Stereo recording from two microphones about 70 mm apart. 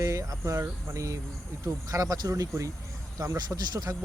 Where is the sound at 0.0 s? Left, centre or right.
Right.